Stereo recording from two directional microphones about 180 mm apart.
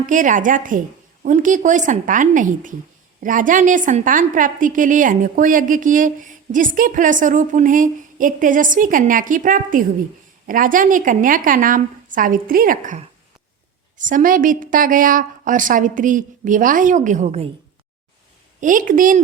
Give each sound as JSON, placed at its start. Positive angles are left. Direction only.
{"t": 0.0, "sound": "a woman's voice", "side_deg": -45}
{"t": 18.6, "sound": "a woman's voice", "side_deg": -45}